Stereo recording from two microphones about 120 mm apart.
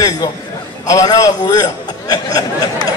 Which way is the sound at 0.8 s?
30° left (ahead or behind).